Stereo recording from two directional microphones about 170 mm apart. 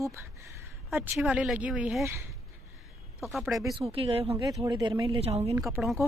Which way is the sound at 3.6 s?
25° right (ahead or behind).